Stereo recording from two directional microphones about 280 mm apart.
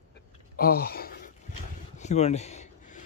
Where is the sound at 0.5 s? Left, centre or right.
Left.